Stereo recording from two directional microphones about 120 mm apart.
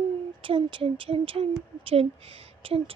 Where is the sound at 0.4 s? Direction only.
45° right (ahead or behind).